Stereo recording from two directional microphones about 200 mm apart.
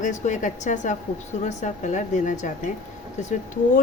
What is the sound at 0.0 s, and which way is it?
Speech, 40° left (ahead or behind).